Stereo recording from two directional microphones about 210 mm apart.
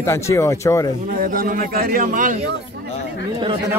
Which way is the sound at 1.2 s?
40° right (ahead or behind).